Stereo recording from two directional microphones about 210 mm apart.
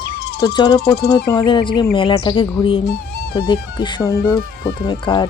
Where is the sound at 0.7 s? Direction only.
50° left (ahead or behind).